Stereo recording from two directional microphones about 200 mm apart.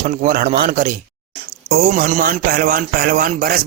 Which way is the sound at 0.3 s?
45° right (ahead or behind).